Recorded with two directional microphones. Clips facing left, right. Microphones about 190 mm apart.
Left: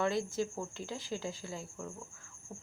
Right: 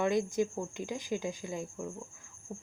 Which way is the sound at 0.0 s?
15° right (ahead or behind).